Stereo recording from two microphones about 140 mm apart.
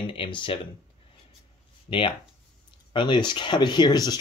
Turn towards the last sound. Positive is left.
turn(degrees=30)  # may be behind; listen again after turning